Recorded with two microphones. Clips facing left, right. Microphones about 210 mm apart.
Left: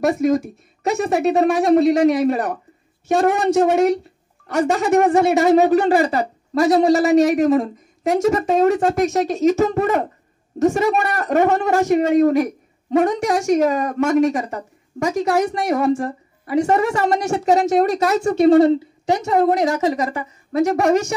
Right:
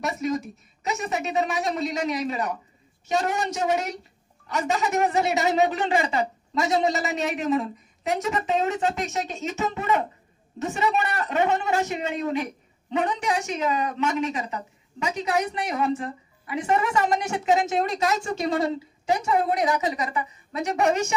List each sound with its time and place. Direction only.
0.0 s a woman's voice: 50° left (ahead or behind)
6.7 s a woman's voice: 50° left (ahead or behind)
17.7 s a woman's voice: 60° left (ahead or behind)
19.2 s a woman's voice: 40° left (ahead or behind)